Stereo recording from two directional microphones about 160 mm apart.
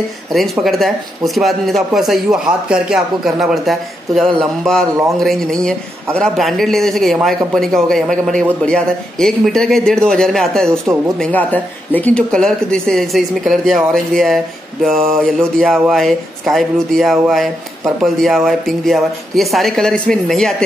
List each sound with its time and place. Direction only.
0.3 s speech: centre (ahead or behind)
10.7 s speech: 15° right (ahead or behind)
11.1 s speech: 10° left (ahead or behind)